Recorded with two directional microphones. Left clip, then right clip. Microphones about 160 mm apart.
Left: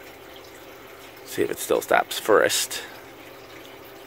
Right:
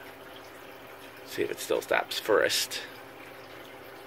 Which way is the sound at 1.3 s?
55° left (ahead or behind).